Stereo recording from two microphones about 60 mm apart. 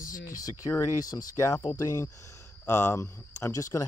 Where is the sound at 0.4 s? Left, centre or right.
Left.